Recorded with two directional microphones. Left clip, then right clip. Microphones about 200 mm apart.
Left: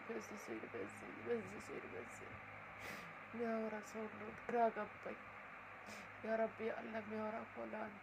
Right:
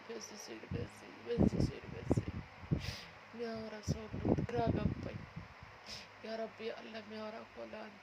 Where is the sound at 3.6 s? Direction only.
20° right (ahead or behind).